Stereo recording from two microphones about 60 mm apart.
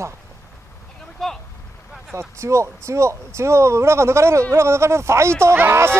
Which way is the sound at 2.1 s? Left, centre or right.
Right.